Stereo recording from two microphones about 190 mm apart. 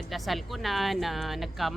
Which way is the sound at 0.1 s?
Centre (ahead or behind).